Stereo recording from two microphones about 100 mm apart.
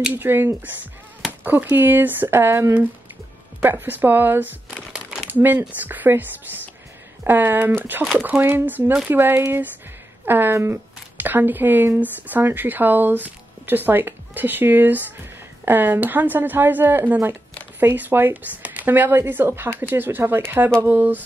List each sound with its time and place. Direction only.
0.1 s speech: 20° right (ahead or behind)
4.6 s crumpling: 5° right (ahead or behind)
5.2 s speech: 20° right (ahead or behind)
7.2 s speech: 20° right (ahead or behind)